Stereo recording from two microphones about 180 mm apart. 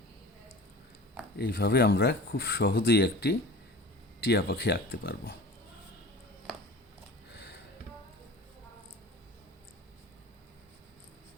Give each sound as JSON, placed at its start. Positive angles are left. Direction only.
{"t": 1.4, "sound": "speech", "side_deg": 60}